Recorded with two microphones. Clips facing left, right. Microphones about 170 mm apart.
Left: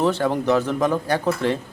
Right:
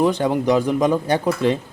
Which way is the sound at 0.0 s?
15° right (ahead or behind).